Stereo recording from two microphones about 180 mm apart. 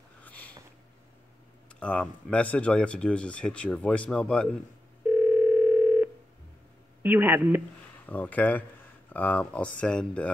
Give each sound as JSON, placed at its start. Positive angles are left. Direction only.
{"t": 0.2, "sound": "sniff", "side_deg": 10}
{"t": 1.8, "sound": "speech", "side_deg": 5}
{"t": 5.0, "sound": "dial tone", "side_deg": -10}
{"t": 7.0, "sound": "speech", "side_deg": -10}
{"t": 8.1, "sound": "speech", "side_deg": 10}